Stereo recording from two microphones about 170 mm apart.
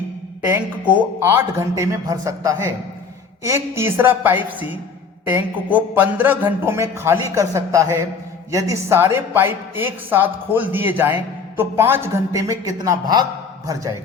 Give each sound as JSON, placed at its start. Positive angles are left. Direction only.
{"t": 0.4, "sound": "a woman's voice", "side_deg": -10}